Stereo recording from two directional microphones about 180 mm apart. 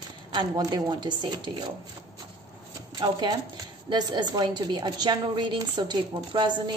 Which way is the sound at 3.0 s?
25° right (ahead or behind).